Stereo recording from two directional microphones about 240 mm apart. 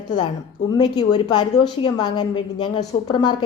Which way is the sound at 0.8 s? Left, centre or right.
Centre.